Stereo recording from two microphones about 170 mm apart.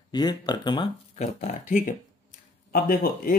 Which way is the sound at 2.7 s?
60° left (ahead or behind).